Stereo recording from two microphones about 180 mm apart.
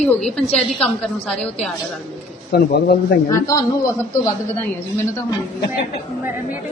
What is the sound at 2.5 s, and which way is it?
Speech, 60° left (ahead or behind).